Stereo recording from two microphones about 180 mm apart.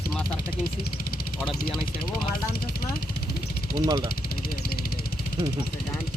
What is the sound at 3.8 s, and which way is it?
Speech, 20° right (ahead or behind).